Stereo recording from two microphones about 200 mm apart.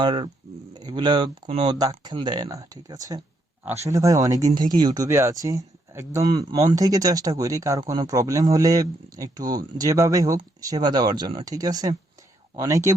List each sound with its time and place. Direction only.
0.0 s speech: 25° right (ahead or behind)